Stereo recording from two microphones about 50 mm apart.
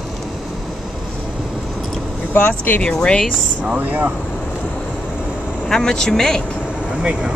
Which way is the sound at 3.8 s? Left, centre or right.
Right.